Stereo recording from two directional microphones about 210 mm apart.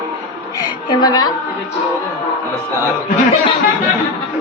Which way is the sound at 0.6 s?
20° left (ahead or behind).